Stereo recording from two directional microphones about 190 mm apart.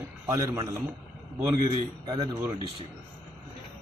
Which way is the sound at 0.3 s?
20° right (ahead or behind).